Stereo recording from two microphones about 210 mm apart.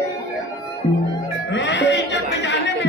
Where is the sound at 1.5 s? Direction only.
55° left (ahead or behind).